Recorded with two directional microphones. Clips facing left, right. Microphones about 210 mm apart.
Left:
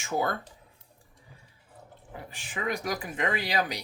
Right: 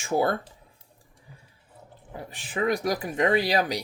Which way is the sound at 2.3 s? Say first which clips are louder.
Right 7 dB; 35° right (ahead or behind).